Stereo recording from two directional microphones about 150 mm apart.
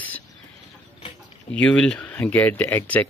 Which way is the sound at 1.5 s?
5° left (ahead or behind).